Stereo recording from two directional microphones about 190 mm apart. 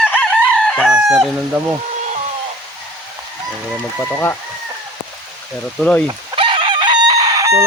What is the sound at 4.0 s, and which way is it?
Speech, 10° left (ahead or behind).